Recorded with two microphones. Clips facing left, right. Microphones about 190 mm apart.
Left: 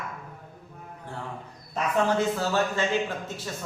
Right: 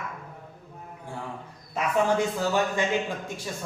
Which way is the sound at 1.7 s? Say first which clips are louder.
Right 1 dB; 15° right (ahead or behind).